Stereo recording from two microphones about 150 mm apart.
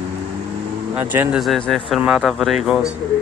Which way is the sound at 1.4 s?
Centre (ahead or behind).